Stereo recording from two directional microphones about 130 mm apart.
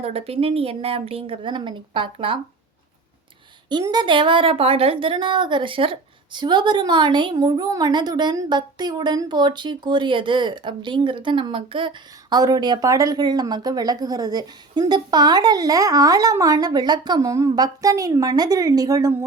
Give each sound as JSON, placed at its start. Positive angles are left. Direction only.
{"t": 0.0, "sound": "a woman's voice", "side_deg": -50}
{"t": 3.8, "sound": "speech", "side_deg": -35}